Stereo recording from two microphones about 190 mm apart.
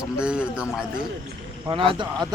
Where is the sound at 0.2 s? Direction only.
5° right (ahead or behind).